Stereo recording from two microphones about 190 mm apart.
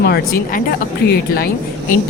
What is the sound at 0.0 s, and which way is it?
A woman's voice, 55° left (ahead or behind).